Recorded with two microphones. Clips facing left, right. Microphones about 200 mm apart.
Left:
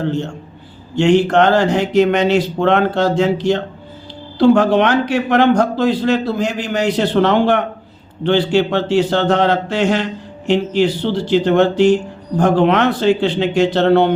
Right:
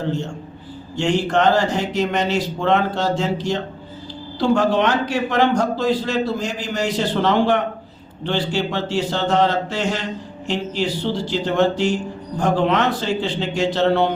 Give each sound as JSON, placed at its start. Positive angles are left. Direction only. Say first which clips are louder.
{"t": 0.9, "sound": "a man's voice", "louder": "left 7 dB", "side_deg": 65}